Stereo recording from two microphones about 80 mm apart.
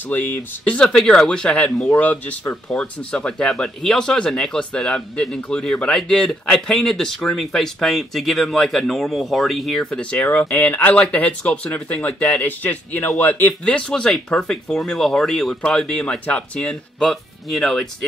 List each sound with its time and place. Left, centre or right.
0.0 s speech: left
0.7 s speech: centre
10.1 s speech: left; by 17.8 s centre